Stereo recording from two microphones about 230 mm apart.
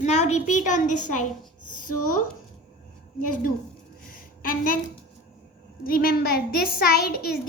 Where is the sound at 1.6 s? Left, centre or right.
Left.